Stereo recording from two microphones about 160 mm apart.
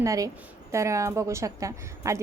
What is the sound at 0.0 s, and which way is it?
A woman's voice, 20° right (ahead or behind).